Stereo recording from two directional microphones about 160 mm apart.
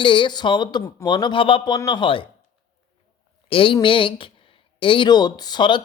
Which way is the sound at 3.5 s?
35° left (ahead or behind).